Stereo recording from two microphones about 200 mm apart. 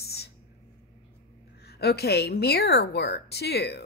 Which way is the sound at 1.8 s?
55° left (ahead or behind).